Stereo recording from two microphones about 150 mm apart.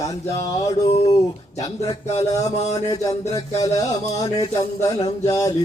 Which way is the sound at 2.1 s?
45° left (ahead or behind).